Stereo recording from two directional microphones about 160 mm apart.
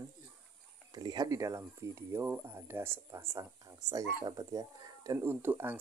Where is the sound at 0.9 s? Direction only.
25° right (ahead or behind).